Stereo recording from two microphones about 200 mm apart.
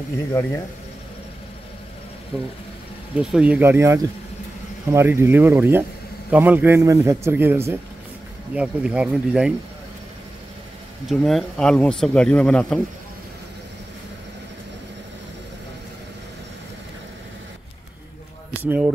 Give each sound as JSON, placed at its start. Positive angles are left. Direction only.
{"t": 0.3, "sound": "speech", "side_deg": 10}
{"t": 3.2, "sound": "speech", "side_deg": -5}
{"t": 11.1, "sound": "speech", "side_deg": 0}
{"t": 18.6, "sound": "speech", "side_deg": -10}